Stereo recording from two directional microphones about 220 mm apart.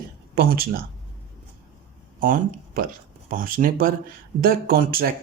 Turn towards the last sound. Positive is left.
turn(degrees=-40)  # may be behind; listen again after turning